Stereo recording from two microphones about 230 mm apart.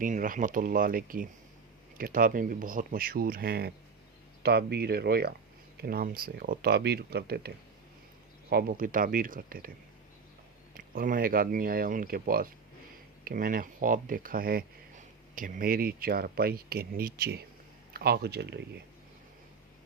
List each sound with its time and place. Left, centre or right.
0.0 s speech: right
10.8 s speech: right